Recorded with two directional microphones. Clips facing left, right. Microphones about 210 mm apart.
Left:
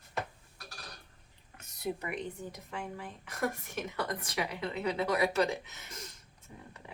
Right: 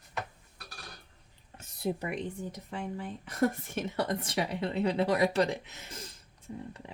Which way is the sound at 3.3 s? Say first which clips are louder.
Right 6 dB; 30° right (ahead or behind).